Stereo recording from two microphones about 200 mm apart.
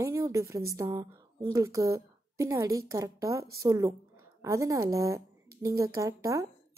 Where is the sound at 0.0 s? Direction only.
15° right (ahead or behind).